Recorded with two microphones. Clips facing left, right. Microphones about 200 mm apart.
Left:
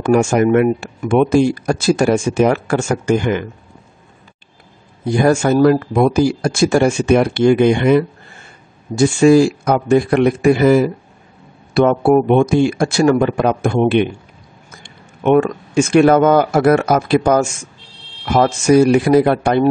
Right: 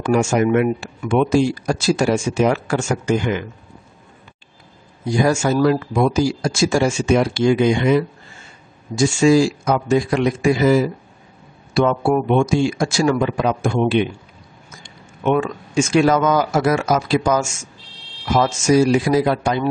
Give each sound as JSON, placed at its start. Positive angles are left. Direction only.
{"t": 0.0, "sound": "speech", "side_deg": 55}
{"t": 5.0, "sound": "speech", "side_deg": 55}